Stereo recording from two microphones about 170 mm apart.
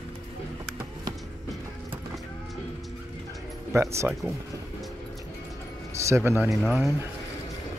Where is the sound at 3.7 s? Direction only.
15° right (ahead or behind).